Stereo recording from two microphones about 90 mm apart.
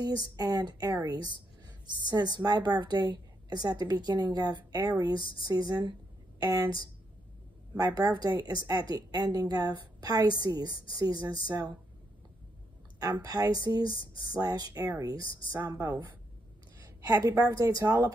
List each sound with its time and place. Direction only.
0.0 s a woman's voice: 45° right (ahead or behind)
13.2 s a woman's voice: 45° right (ahead or behind)
17.0 s a woman's voice: 40° right (ahead or behind)